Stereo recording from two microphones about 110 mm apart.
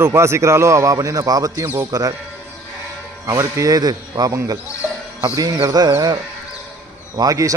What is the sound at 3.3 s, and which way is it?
A man's voice, 30° right (ahead or behind).